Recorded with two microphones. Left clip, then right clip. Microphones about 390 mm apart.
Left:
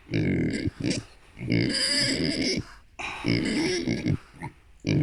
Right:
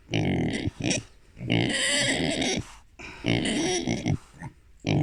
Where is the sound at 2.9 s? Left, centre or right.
Centre.